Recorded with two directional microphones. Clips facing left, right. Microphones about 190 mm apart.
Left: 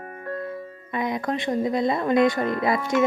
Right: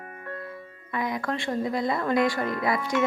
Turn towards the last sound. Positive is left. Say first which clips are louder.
# left 4 dB
turn(degrees=45)  # may be behind; listen again after turning